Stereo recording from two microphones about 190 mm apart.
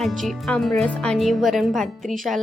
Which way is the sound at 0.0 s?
Centre (ahead or behind).